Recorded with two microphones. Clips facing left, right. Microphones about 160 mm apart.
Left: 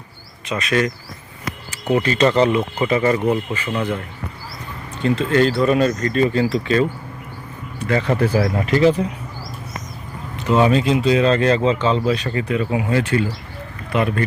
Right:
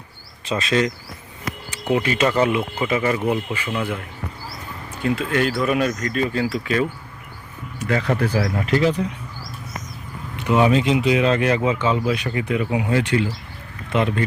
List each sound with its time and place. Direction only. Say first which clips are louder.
0.4 s speech: even; 30° right (ahead or behind)
1.7 s speech: left 2 dB; 10° right (ahead or behind)
7.9 s speech: left 3 dB; 5° left (ahead or behind)
10.4 s speech: left 1 dB; 15° right (ahead or behind)